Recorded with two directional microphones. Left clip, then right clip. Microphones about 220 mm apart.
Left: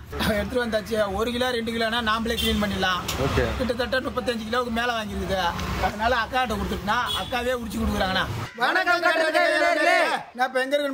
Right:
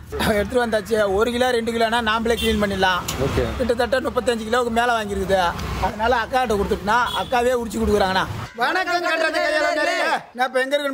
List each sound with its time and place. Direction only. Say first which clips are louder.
0.2 s a man's voice: right 5 dB; 15° right (ahead or behind)